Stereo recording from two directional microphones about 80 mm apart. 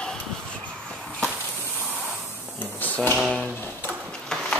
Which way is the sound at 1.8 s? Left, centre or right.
Right.